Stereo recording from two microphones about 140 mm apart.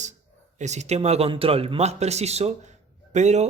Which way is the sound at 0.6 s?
55° right (ahead or behind).